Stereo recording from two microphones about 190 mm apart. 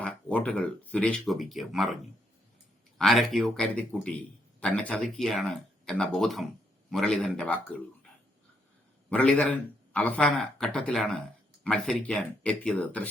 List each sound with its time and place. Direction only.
0.0 s speech: 5° left (ahead or behind)
3.0 s speech: centre (ahead or behind)
9.0 s a man's voice: 5° left (ahead or behind)